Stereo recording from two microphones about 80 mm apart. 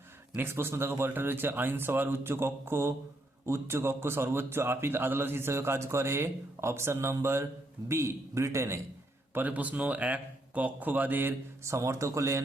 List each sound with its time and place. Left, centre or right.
0.3 s a man's voice: right
9.3 s speech: right